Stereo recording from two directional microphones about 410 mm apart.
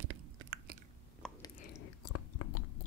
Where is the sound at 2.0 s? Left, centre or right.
Left.